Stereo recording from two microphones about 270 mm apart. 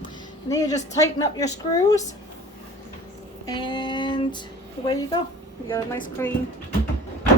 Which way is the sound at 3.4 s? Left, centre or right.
Centre.